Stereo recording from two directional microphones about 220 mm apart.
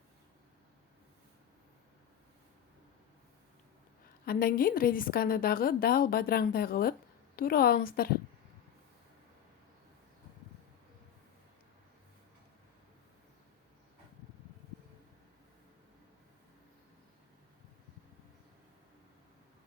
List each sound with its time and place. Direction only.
4.3 s a woman's voice: 40° left (ahead or behind)